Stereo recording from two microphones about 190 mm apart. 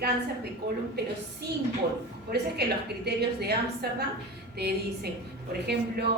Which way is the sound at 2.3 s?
60° right (ahead or behind).